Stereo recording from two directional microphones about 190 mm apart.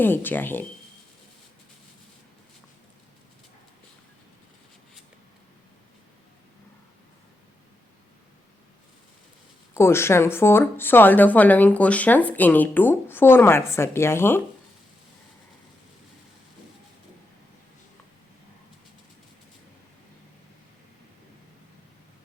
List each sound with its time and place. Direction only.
0.0 s speech: 10° left (ahead or behind)
9.7 s speech: 15° left (ahead or behind)